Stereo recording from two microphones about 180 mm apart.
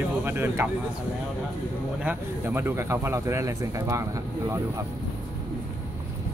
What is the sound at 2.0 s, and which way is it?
Speech, 10° right (ahead or behind).